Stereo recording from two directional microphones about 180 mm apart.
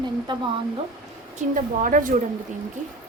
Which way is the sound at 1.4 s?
45° right (ahead or behind).